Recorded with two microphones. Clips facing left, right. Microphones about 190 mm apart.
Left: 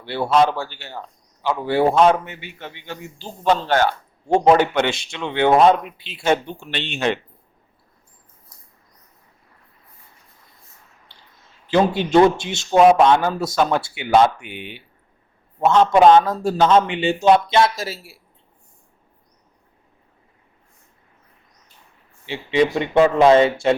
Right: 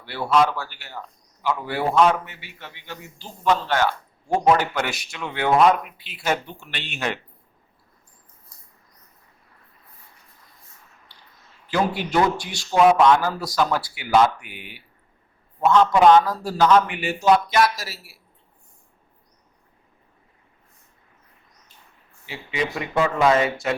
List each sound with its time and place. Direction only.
0.0 s a man's voice: 25° left (ahead or behind)
4.3 s a man's voice: 25° left (ahead or behind)
11.7 s a man's voice: 25° left (ahead or behind)
22.3 s a man's voice: 30° left (ahead or behind)